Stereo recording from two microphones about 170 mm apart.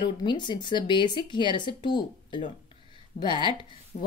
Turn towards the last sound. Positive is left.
turn(degrees=30)  # may be behind; listen again after turning